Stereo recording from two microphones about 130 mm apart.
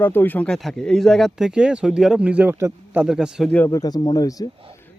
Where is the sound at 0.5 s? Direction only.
Centre (ahead or behind).